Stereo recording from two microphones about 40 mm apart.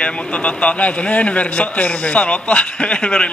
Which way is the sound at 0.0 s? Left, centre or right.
Left.